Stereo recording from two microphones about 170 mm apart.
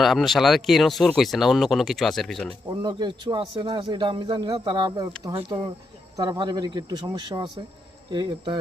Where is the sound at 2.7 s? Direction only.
25° right (ahead or behind).